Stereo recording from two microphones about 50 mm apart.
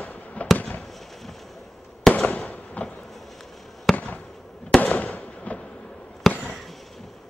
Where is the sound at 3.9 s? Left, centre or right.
Left.